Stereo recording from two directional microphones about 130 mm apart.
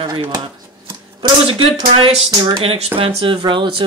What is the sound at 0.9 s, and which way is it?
Typewriter, 40° right (ahead or behind).